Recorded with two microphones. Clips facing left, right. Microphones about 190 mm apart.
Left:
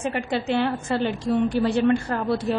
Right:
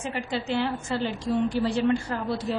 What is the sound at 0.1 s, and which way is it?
A woman's voice, 60° left (ahead or behind).